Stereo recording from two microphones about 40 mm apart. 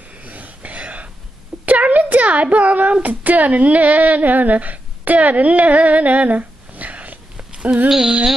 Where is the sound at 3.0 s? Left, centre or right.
Right.